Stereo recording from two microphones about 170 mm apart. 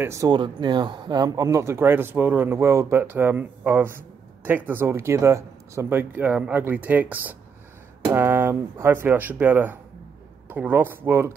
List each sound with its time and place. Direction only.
0.0 s speech: 20° right (ahead or behind)